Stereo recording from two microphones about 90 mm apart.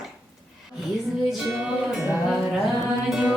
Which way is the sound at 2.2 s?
5° right (ahead or behind).